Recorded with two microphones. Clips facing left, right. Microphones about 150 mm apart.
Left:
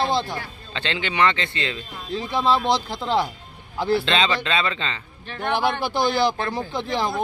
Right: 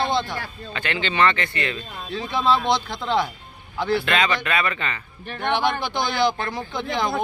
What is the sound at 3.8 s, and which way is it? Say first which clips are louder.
Speech: left 1 dB; 25° left (ahead or behind).